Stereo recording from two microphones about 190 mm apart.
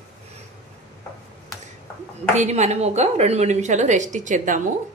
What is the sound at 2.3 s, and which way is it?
A woman's voice, 35° right (ahead or behind).